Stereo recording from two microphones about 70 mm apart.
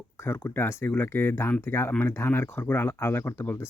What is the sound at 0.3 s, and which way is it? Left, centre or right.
Speech, left.